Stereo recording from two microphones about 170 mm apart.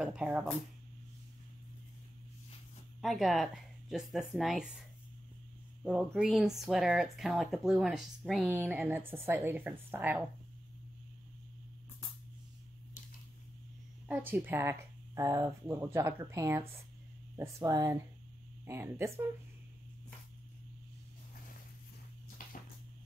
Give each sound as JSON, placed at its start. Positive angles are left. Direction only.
{"t": 0.0, "sound": "speech", "side_deg": -5}
{"t": 3.0, "sound": "speech", "side_deg": 0}
{"t": 5.9, "sound": "speech", "side_deg": -5}
{"t": 14.0, "sound": "speech", "side_deg": -10}
{"t": 22.4, "sound": "a sound", "side_deg": 55}